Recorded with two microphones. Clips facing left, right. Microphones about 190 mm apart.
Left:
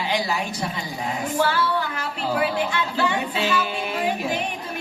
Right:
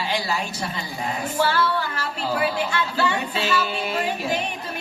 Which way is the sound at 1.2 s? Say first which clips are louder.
Even; 15° left (ahead or behind).